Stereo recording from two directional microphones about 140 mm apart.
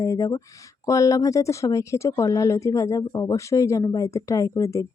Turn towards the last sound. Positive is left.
turn(degrees=20)  # may be behind; listen again after turning